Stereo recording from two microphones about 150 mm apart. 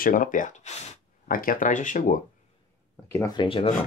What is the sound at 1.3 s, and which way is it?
Speech, 65° left (ahead or behind).